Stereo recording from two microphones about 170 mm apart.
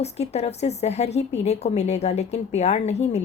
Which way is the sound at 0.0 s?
40° left (ahead or behind).